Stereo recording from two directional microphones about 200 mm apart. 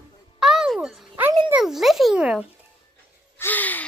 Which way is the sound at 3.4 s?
10° left (ahead or behind).